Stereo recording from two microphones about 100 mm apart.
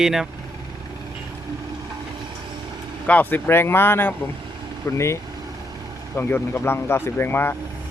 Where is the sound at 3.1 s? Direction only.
20° left (ahead or behind).